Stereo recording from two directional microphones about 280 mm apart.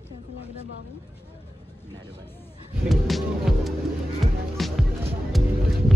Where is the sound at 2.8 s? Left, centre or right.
Centre.